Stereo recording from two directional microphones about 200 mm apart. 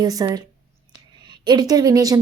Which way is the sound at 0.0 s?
20° right (ahead or behind).